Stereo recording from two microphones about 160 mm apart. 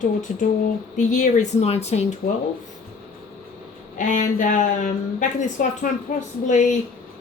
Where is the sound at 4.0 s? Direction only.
55° left (ahead or behind).